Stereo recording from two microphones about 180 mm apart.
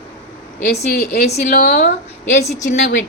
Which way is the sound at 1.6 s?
60° left (ahead or behind).